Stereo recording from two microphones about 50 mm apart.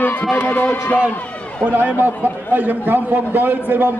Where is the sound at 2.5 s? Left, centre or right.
Right.